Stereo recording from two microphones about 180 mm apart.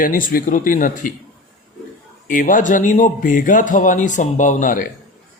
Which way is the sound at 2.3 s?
45° left (ahead or behind).